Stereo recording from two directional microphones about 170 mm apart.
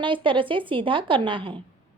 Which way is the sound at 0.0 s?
30° right (ahead or behind).